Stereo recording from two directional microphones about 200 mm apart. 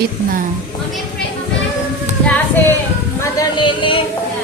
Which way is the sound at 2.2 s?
10° left (ahead or behind).